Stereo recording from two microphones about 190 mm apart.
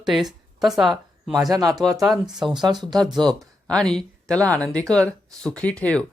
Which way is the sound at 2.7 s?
20° right (ahead or behind).